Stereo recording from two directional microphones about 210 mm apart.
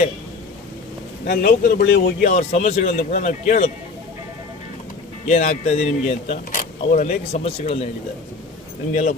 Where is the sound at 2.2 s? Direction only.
35° left (ahead or behind).